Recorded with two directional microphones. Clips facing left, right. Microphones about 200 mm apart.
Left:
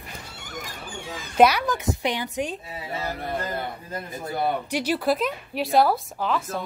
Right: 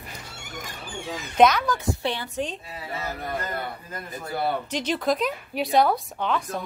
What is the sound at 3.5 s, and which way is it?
Speech, 25° left (ahead or behind).